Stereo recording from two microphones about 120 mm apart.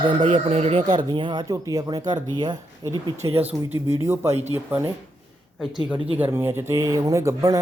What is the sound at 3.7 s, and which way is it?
Speech, 20° right (ahead or behind).